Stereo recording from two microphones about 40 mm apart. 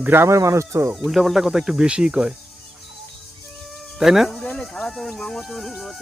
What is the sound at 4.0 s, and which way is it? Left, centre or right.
Speech, centre.